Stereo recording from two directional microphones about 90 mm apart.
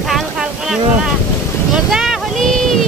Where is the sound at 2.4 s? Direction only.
5° left (ahead or behind).